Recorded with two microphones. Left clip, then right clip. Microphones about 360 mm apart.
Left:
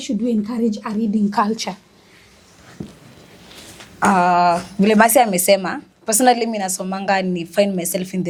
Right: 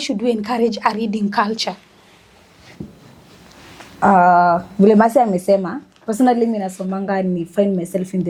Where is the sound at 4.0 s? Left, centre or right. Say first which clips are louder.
Right 3 dB; left.